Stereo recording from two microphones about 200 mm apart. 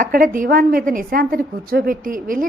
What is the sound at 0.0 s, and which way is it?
A woman's voice, 45° right (ahead or behind).